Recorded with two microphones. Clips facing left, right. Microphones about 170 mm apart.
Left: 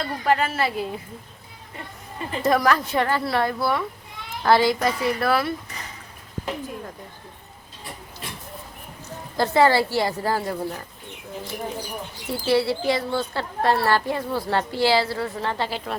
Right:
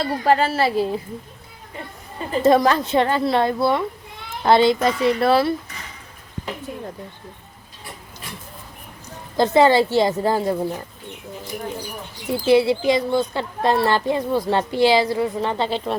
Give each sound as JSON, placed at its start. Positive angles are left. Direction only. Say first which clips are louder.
{"t": 0.0, "sound": "speech", "louder": "right 4 dB", "side_deg": -35}
{"t": 2.3, "sound": "a woman's voice", "louder": "right 5 dB", "side_deg": -25}
{"t": 9.4, "sound": "a woman's voice", "louder": "right 4 dB", "side_deg": -20}
{"t": 12.3, "sound": "speech", "louder": "right 5 dB", "side_deg": -15}